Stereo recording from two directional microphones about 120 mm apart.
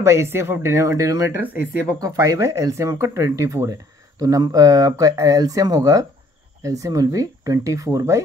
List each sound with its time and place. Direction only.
0.0 s speech: 20° right (ahead or behind)
1.4 s speech: 15° right (ahead or behind)
2.0 s speech: 30° right (ahead or behind)